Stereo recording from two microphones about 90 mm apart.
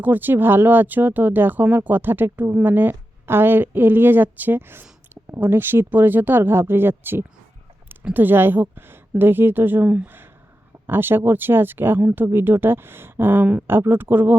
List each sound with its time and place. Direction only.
0.0 s speech: 20° right (ahead or behind)